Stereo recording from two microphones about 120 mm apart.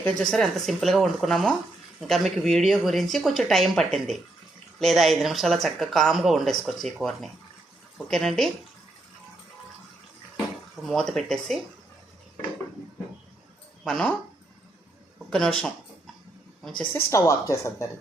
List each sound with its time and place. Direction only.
0.2 s speech: 5° left (ahead or behind)
10.8 s speech: 5° left (ahead or behind)
13.8 s speech: 10° left (ahead or behind)
15.3 s speech: 5° left (ahead or behind)
17.1 s speech: 25° left (ahead or behind)